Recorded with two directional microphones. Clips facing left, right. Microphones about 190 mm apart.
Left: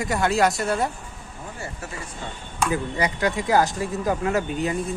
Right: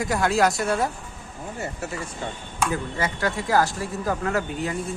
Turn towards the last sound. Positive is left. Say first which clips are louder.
# left 2 dB
turn(degrees=20)  # may be behind; listen again after turning